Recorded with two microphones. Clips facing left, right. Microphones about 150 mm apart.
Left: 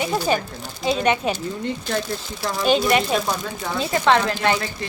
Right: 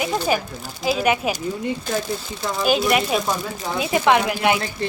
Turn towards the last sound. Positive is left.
turn(degrees=-10)  # may be behind; listen again after turning